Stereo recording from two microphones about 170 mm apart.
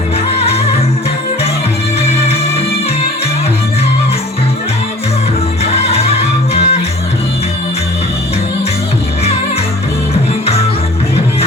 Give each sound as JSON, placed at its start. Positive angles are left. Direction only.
{"t": 0.3, "sound": "music", "side_deg": 35}
{"t": 2.0, "sound": "music", "side_deg": 35}
{"t": 5.7, "sound": "music", "side_deg": 35}